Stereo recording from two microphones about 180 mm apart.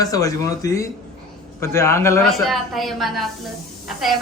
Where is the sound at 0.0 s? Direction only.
20° left (ahead or behind).